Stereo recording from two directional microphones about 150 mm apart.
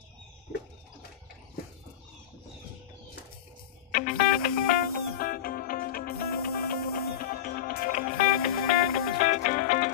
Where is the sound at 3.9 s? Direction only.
65° left (ahead or behind).